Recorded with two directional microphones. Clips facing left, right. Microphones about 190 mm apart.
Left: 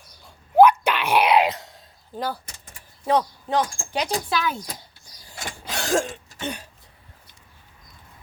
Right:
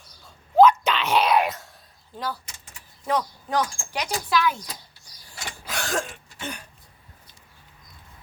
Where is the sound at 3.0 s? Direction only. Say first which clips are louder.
Left 4 dB; 30° left (ahead or behind).